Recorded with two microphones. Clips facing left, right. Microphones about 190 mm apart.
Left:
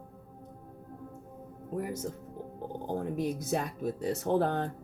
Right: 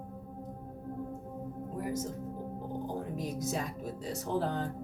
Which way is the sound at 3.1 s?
60° left (ahead or behind).